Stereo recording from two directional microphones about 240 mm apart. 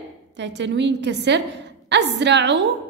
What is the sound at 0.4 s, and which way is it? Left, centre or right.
A woman's voice, right.